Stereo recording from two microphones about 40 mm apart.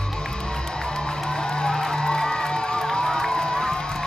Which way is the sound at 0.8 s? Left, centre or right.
Centre.